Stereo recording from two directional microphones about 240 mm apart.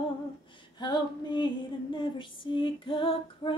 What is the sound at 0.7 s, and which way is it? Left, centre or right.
Female singing, centre.